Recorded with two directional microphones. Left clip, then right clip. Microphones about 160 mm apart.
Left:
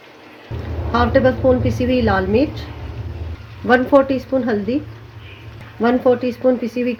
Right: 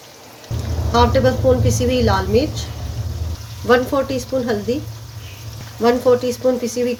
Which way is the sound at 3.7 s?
40° left (ahead or behind).